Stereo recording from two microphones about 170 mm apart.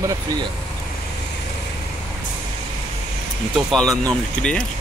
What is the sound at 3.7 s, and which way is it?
Speech, 5° left (ahead or behind).